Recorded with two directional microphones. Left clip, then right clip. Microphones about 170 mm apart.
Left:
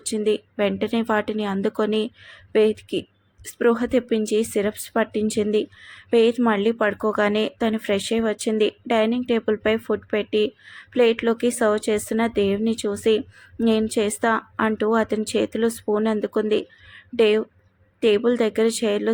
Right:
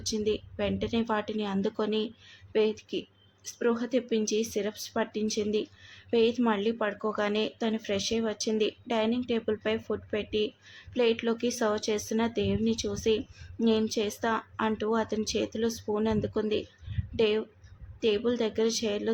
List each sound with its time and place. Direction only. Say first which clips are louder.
0.1 s speech: left 8 dB; 25° left (ahead or behind)